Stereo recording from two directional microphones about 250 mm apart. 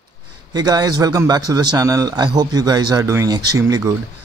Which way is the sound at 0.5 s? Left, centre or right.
Centre.